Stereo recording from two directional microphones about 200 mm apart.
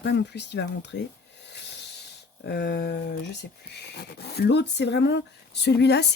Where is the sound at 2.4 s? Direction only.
55° left (ahead or behind).